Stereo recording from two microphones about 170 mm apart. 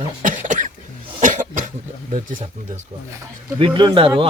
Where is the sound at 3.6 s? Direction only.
30° right (ahead or behind).